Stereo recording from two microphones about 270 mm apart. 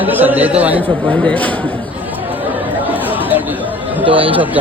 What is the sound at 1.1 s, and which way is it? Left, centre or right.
Speech, centre.